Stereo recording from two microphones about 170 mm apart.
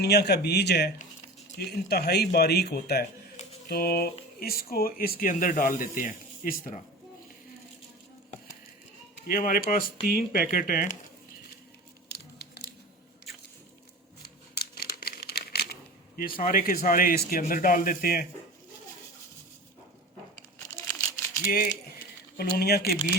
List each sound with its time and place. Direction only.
0.0 s speech: 70° left (ahead or behind); by 6.8 s 50° left (ahead or behind)
9.2 s speech: 55° left (ahead or behind)
12.1 s music: 70° left (ahead or behind)
14.2 s crumpling: 65° left (ahead or behind)
16.5 s speech: 60° left (ahead or behind)
22.4 s speech: 65° left (ahead or behind)